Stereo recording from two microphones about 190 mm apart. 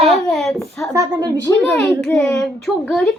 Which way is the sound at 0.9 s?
20° right (ahead or behind).